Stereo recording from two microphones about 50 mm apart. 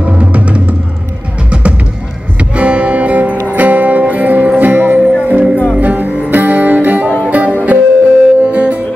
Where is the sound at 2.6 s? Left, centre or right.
Right.